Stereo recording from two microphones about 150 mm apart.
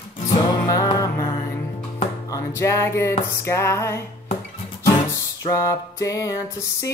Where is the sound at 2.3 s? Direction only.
20° left (ahead or behind).